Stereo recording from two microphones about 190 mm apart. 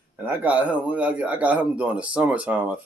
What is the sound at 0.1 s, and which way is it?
A man's voice, 10° right (ahead or behind).